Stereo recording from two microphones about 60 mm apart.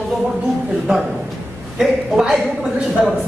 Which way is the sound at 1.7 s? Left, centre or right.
Centre.